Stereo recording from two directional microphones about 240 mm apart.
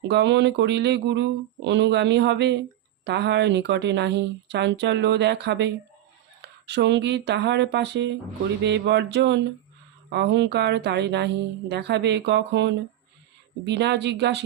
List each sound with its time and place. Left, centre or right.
0.1 s speech: right